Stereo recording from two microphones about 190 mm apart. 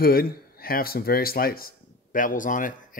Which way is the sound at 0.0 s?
50° left (ahead or behind).